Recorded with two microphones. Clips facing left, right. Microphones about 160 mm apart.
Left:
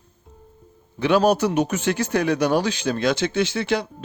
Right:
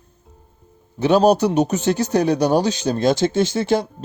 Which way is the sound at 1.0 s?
35° right (ahead or behind).